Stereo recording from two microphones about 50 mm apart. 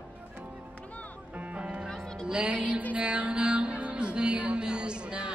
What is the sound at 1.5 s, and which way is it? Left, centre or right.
Music, right.